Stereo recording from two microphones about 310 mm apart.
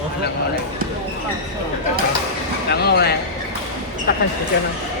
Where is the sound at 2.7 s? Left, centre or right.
Left.